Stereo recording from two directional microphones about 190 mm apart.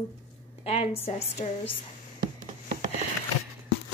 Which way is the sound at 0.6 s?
30° left (ahead or behind).